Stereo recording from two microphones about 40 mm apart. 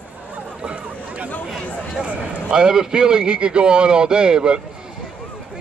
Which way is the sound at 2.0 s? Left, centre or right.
Right.